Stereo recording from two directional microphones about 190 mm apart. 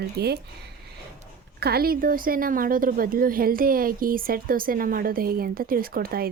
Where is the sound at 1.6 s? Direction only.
55° right (ahead or behind).